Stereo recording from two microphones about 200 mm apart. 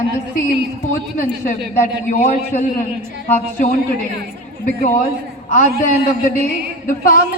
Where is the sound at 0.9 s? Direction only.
40° left (ahead or behind).